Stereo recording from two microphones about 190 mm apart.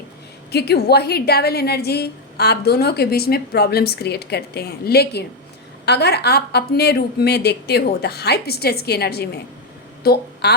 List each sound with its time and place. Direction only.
0.5 s a woman's voice: 60° left (ahead or behind)